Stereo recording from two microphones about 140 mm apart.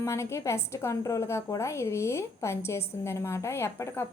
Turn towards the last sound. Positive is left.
turn(degrees=20)  # may be behind; listen again after turning